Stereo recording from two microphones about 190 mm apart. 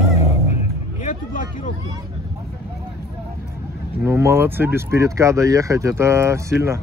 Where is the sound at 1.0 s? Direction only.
40° left (ahead or behind).